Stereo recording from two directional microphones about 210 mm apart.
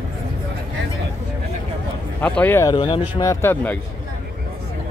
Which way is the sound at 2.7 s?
20° left (ahead or behind).